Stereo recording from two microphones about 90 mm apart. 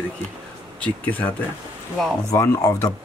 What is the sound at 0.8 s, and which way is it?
Speech, 20° left (ahead or behind).